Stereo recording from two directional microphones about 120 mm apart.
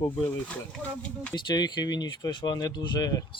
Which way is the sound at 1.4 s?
35° left (ahead or behind).